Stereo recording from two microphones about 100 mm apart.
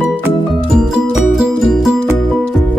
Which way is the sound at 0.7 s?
5° right (ahead or behind).